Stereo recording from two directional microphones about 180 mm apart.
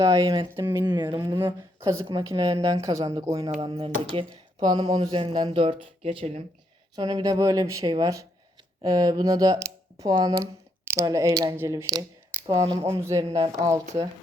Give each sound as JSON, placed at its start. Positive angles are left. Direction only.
{"t": 0.0, "sound": "speech", "side_deg": -20}
{"t": 3.6, "sound": "speech", "side_deg": -30}
{"t": 6.9, "sound": "speech", "side_deg": -20}
{"t": 13.8, "sound": "speech", "side_deg": -40}